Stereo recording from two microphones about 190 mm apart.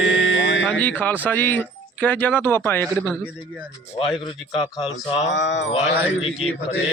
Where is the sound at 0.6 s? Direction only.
5° left (ahead or behind).